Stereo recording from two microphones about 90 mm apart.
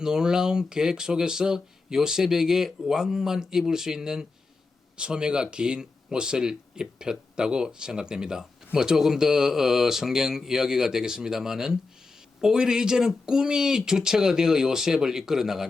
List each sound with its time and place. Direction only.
0.0 s speech: 5° right (ahead or behind)